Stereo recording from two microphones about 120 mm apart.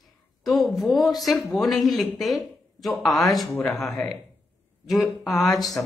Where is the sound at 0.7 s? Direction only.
Centre (ahead or behind).